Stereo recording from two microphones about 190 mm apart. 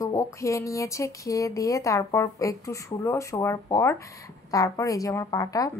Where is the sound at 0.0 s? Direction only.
15° left (ahead or behind).